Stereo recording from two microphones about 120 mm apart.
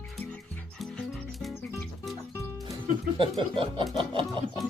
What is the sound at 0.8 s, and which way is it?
Music, centre (ahead or behind).